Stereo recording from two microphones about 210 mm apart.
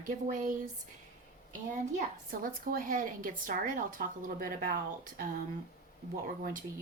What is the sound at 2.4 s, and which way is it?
Speech, 40° right (ahead or behind).